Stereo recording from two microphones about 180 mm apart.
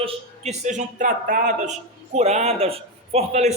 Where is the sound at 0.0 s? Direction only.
40° right (ahead or behind).